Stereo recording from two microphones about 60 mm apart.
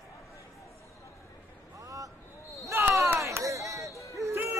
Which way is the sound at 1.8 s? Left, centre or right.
Right.